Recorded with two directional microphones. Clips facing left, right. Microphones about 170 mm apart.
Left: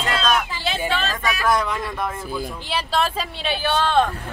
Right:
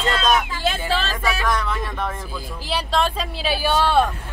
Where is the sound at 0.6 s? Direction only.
45° right (ahead or behind).